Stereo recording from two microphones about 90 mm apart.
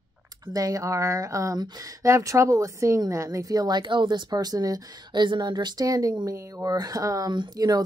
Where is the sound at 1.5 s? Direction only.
50° right (ahead or behind).